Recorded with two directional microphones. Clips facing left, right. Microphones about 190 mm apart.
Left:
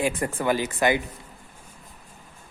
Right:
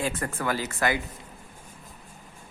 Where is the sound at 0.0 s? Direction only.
15° left (ahead or behind).